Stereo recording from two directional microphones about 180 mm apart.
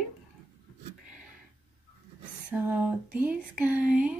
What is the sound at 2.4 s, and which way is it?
Speech, 10° right (ahead or behind).